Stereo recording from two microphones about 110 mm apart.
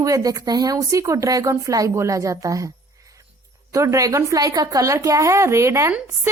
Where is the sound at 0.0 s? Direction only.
30° right (ahead or behind).